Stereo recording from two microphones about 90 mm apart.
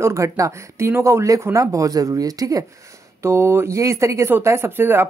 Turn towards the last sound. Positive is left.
turn(degrees=-25)  # may be behind; listen again after turning